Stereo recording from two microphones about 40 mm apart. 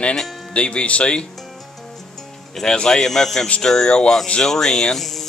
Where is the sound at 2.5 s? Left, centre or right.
Centre.